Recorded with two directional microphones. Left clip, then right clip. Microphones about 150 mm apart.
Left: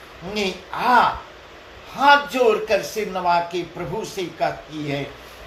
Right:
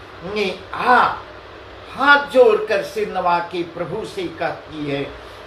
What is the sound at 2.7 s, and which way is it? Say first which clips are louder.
Speech: right 1 dB; 35° left (ahead or behind).